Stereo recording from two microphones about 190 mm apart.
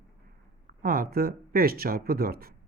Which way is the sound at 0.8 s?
50° right (ahead or behind).